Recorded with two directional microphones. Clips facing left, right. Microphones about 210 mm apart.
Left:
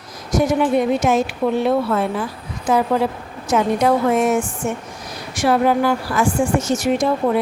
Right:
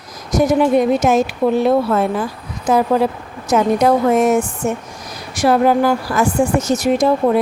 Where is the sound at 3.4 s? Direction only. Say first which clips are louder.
Right 3 dB; 40° right (ahead or behind).